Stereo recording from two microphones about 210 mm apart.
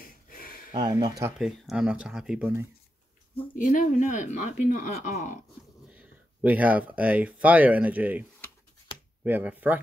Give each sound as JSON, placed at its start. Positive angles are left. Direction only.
{"t": 0.0, "sound": "a sound", "side_deg": 45}
{"t": 0.7, "sound": "speech", "side_deg": -20}
{"t": 1.4, "sound": "speech", "side_deg": 0}
{"t": 3.5, "sound": "a woman's voice", "side_deg": 40}
{"t": 5.9, "sound": "speech", "side_deg": -10}